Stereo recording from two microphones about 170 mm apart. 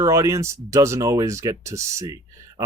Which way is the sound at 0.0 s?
20° right (ahead or behind).